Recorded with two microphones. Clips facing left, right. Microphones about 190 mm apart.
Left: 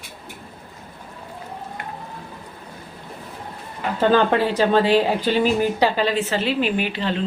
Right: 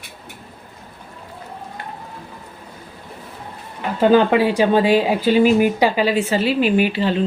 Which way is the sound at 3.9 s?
10° right (ahead or behind).